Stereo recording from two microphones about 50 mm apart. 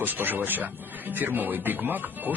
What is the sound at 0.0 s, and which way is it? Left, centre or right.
Speech, right.